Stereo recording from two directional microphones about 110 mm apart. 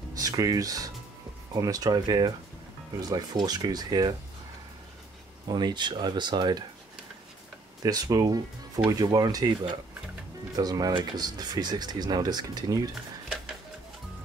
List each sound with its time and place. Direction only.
0.1 s speech: 35° right (ahead or behind)
5.5 s speech: 40° right (ahead or behind)
7.8 s speech: 35° right (ahead or behind)
10.9 s speech: 50° right (ahead or behind)
11.2 s speech: 35° right (ahead or behind)